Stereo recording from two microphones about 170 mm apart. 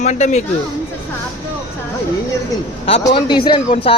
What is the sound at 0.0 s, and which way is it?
Speech, 45° left (ahead or behind).